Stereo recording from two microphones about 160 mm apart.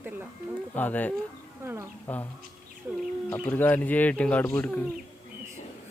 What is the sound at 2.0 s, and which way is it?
Speech, 15° left (ahead or behind).